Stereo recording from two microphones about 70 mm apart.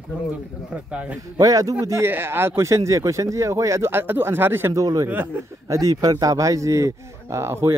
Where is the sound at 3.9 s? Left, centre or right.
Right.